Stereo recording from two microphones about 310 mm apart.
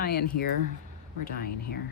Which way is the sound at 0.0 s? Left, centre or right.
Left.